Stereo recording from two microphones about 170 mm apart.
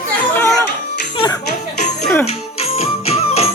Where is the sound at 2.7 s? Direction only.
35° left (ahead or behind).